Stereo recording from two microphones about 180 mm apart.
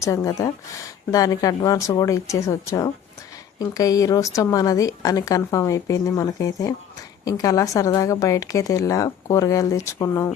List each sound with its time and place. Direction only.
0.0 s a woman's voice: 15° left (ahead or behind)